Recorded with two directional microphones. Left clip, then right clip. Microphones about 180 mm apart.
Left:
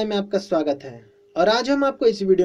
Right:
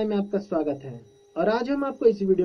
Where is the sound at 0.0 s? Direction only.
20° left (ahead or behind).